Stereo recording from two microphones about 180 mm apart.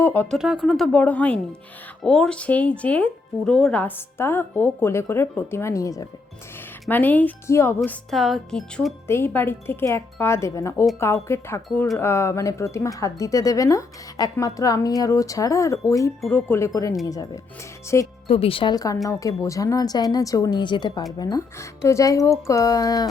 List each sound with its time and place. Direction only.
0.0 s speech: 15° left (ahead or behind)
0.3 s speech: 5° right (ahead or behind); by 7.8 s 15° left (ahead or behind)
7.8 s speech: centre (ahead or behind); by 18.1 s 15° left (ahead or behind)
18.3 s speech: 30° left (ahead or behind)